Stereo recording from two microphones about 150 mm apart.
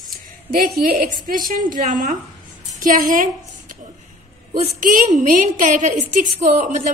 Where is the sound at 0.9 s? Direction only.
65° right (ahead or behind).